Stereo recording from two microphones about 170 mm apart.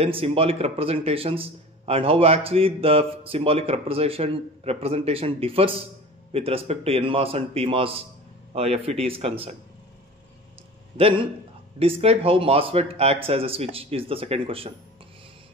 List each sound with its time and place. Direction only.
0.0 s speech: 35° right (ahead or behind)
11.0 s speech: 35° right (ahead or behind)